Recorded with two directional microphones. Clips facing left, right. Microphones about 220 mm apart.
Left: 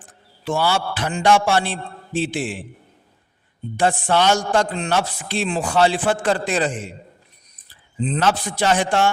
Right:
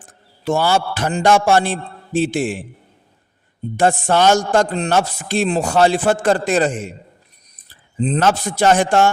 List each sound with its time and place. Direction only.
0.0 s a man's voice: 45° right (ahead or behind)
3.8 s a man's voice: 45° right (ahead or behind)